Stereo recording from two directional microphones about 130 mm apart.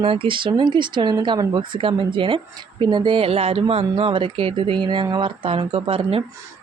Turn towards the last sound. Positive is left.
turn(degrees=-50)  # may be behind; listen again after turning